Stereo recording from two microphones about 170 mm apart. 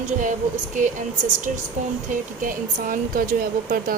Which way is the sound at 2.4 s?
55° right (ahead or behind).